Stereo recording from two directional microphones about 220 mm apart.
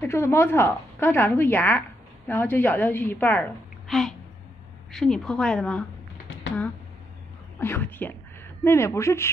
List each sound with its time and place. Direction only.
0.0 s a woman's voice: 10° left (ahead or behind)
7.6 s a woman's voice: 10° left (ahead or behind)